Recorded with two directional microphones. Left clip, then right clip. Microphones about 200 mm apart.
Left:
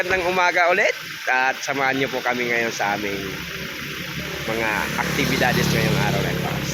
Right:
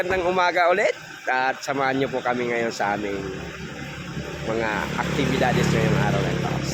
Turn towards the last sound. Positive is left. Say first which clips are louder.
# left 1 dB
turn(degrees=0)  # may be behind; listen again after turning